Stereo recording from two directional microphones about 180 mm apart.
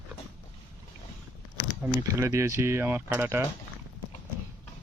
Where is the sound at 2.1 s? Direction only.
15° right (ahead or behind).